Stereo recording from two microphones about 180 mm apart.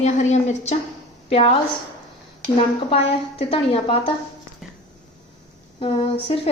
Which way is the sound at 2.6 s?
35° left (ahead or behind).